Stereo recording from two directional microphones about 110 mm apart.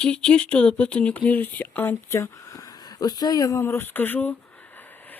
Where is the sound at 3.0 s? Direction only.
40° left (ahead or behind); by 4.4 s 15° left (ahead or behind).